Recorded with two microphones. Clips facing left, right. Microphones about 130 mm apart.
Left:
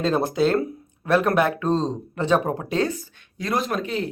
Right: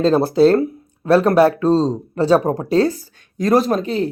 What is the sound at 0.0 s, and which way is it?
Speech, 30° right (ahead or behind).